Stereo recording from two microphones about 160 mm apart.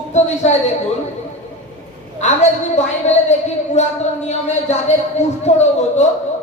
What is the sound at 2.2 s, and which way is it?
A woman's voice, 45° left (ahead or behind).